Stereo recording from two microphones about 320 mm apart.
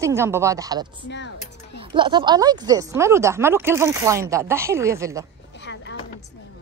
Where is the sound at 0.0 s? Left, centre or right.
Centre.